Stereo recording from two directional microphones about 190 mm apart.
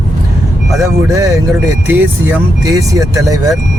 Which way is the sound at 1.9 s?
15° right (ahead or behind).